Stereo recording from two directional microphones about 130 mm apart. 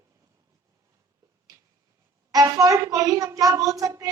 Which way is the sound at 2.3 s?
30° right (ahead or behind).